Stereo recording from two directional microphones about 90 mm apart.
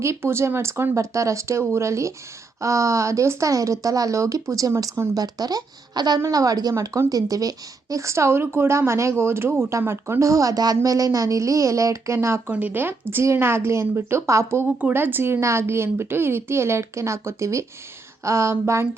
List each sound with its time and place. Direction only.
0.0 s speech: 30° right (ahead or behind); by 6.1 s 50° right (ahead or behind)
6.1 s speech: 35° right (ahead or behind)
12.5 s speech: 20° right (ahead or behind)
14.8 s speech: 20° right (ahead or behind)